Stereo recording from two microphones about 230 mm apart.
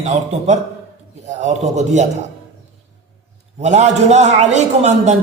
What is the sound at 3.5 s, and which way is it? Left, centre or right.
A man's voice, right.